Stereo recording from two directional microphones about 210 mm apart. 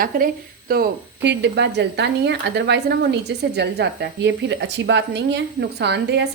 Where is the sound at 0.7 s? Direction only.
50° right (ahead or behind).